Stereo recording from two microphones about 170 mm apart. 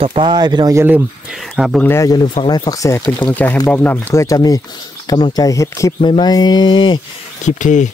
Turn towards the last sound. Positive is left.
turn(degrees=45)  # may be behind; listen again after turning